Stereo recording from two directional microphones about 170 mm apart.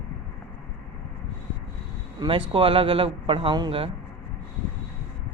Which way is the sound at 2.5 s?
30° right (ahead or behind).